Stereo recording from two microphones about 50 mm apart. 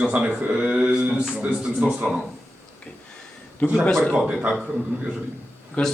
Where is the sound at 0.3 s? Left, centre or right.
Right.